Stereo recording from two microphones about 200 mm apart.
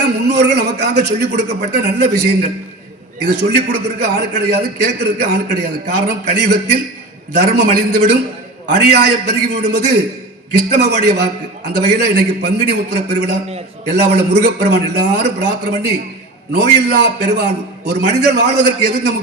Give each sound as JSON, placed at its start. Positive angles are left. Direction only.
{"t": 0.3, "sound": "a man's voice", "side_deg": -55}